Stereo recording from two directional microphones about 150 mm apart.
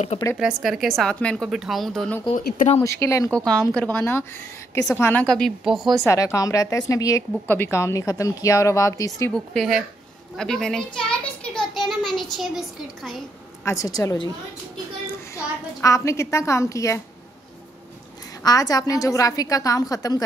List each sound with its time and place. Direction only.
0.4 s speech: 5° right (ahead or behind)
2.8 s speech: 20° left (ahead or behind)
3.3 s a woman's voice: 5° left (ahead or behind)
6.0 s speech: 20° left (ahead or behind)
9.3 s speech: 5° left (ahead or behind)
11.1 s a sound: 5° left (ahead or behind)
12.2 s speech: centre (ahead or behind)
13.7 s speech: 25° left (ahead or behind)
15.3 s speech: 20° left (ahead or behind)
18.4 s speech: 25° left (ahead or behind)